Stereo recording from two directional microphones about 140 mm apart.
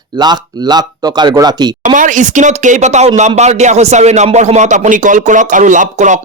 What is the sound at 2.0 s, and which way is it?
Speech, 65° right (ahead or behind).